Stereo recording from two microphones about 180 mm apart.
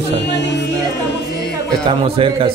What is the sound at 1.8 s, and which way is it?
Speech, 30° right (ahead or behind).